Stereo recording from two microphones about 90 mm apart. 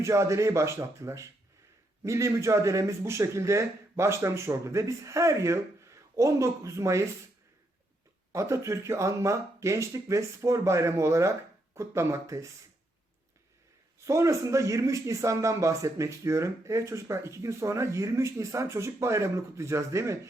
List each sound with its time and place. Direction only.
0.0 s speech: 35° right (ahead or behind)
8.3 s speech: 35° right (ahead or behind)
14.0 s speech: 35° right (ahead or behind)